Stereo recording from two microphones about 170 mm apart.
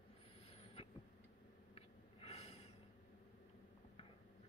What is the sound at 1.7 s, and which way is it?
Snort, 35° left (ahead or behind).